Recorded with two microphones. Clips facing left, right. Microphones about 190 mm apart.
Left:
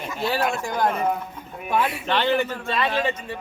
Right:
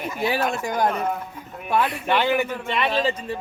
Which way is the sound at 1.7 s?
Centre (ahead or behind).